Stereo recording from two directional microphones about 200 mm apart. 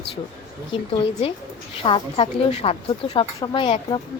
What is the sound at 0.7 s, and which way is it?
Speech, 30° left (ahead or behind).